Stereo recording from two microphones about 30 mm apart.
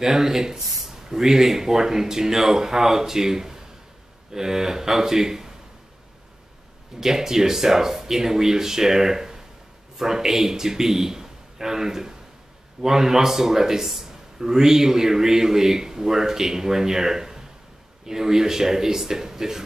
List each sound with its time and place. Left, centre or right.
0.0 s speech: centre
7.0 s a man's voice: centre